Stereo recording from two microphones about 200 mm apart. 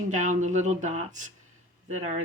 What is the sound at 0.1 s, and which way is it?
Speech, 40° right (ahead or behind).